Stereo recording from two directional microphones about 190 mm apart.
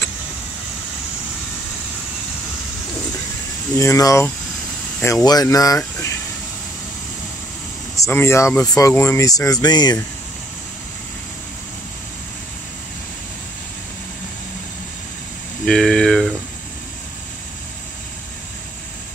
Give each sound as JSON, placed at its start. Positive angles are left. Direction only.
{"t": 3.7, "sound": "speech", "side_deg": 15}
{"t": 7.9, "sound": "speech", "side_deg": 15}
{"t": 15.6, "sound": "speech", "side_deg": 5}